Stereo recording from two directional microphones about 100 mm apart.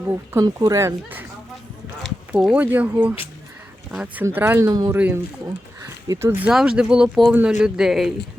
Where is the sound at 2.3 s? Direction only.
10° right (ahead or behind).